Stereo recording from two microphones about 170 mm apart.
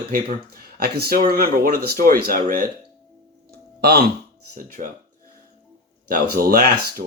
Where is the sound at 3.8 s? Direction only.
70° right (ahead or behind).